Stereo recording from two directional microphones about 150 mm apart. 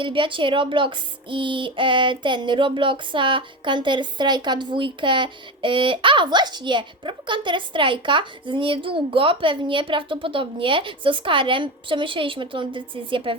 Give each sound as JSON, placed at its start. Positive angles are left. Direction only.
{"t": 0.0, "sound": "speech", "side_deg": -35}